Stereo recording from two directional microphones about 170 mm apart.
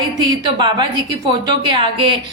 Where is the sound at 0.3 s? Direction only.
25° right (ahead or behind).